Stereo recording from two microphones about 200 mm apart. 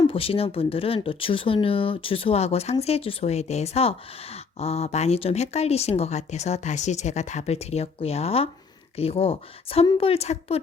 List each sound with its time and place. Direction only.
0.0 s a woman's voice: 25° left (ahead or behind)